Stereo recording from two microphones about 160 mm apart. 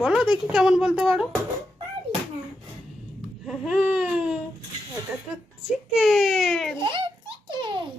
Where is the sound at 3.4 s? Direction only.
5° right (ahead or behind).